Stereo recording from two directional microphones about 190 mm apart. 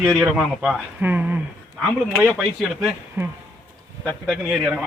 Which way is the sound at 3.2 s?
10° right (ahead or behind).